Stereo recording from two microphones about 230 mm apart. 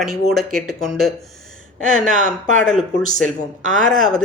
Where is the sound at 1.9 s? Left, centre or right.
Right.